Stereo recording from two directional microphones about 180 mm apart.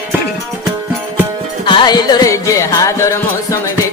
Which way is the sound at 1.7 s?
25° left (ahead or behind).